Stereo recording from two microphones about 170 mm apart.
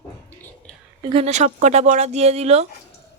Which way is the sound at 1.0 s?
35° right (ahead or behind).